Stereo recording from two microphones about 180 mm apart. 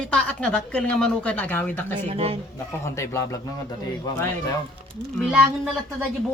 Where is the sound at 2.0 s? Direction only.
30° right (ahead or behind).